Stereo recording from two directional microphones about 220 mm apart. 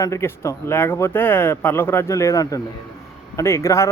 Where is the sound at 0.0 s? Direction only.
10° left (ahead or behind).